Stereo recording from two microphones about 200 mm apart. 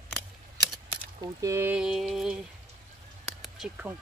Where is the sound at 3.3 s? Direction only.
5° right (ahead or behind).